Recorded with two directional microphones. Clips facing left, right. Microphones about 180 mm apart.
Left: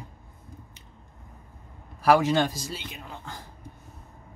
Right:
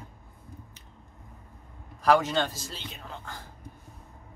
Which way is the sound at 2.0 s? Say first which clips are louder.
Left 3 dB; 10° left (ahead or behind).